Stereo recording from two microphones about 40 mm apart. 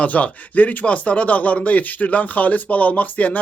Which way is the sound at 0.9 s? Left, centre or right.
Left.